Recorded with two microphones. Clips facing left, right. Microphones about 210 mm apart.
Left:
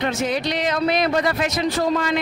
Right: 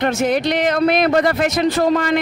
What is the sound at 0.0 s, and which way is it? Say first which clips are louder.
A man's voice: right 5 dB; 50° right (ahead or behind).